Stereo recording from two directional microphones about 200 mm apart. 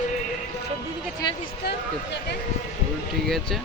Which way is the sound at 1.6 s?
55° left (ahead or behind).